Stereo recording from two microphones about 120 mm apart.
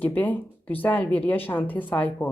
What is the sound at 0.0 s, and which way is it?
A woman's voice, 15° left (ahead or behind).